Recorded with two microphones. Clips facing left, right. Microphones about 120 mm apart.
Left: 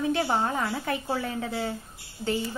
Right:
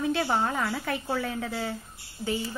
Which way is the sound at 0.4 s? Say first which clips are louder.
Even; 30° left (ahead or behind).